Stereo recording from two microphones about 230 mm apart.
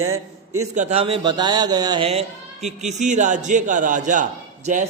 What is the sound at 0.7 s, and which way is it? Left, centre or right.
A man's voice, right.